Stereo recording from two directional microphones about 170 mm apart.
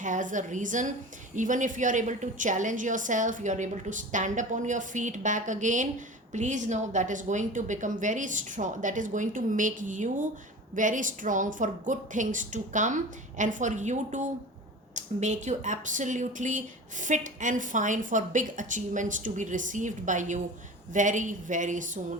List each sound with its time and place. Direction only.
0.0 s speech: 50° right (ahead or behind)